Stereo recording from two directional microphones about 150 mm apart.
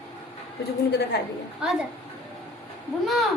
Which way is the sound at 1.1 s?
90° left.